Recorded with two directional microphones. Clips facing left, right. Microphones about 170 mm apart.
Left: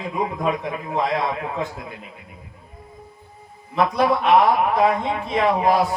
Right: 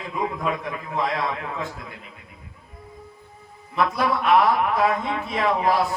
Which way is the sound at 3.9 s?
25° left (ahead or behind).